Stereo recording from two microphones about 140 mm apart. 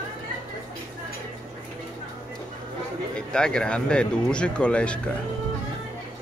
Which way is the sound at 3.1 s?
5° left (ahead or behind).